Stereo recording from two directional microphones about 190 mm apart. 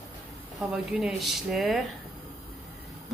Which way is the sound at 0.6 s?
Centre (ahead or behind).